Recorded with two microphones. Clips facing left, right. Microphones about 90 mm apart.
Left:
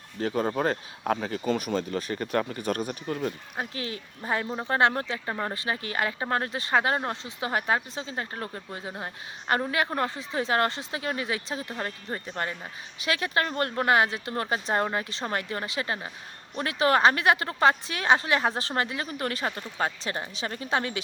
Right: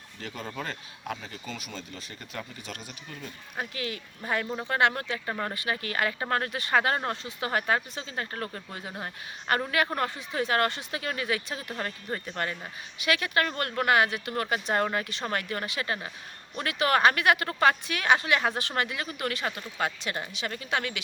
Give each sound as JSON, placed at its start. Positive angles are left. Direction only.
{"t": 0.2, "sound": "speech", "side_deg": 45}
{"t": 3.6, "sound": "speech", "side_deg": 30}